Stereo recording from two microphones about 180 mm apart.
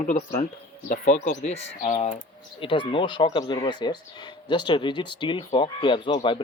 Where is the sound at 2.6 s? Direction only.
30° left (ahead or behind).